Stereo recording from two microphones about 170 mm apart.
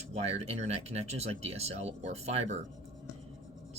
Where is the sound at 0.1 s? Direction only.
40° right (ahead or behind).